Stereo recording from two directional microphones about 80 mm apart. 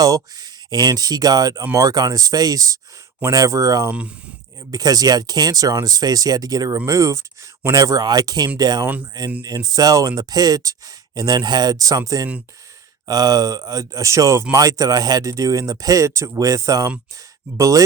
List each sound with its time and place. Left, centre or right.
0.0 s speech: right
6.8 s speech: right
7.8 s speech: right